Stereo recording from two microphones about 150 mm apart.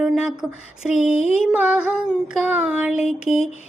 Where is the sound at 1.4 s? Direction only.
5° right (ahead or behind).